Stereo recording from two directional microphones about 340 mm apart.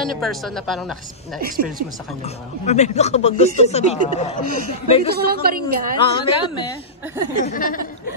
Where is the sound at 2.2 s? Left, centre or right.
Centre.